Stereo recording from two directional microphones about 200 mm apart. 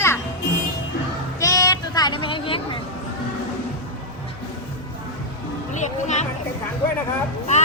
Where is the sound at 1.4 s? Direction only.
15° left (ahead or behind).